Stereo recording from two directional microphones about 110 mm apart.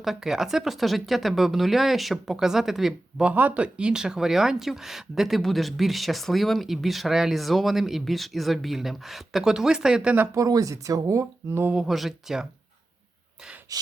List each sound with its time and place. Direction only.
0.0 s speech: 5° right (ahead or behind)
10.3 s speech: 30° right (ahead or behind)
11.6 s speech: 10° right (ahead or behind)
13.7 s gasp: 35° right (ahead or behind)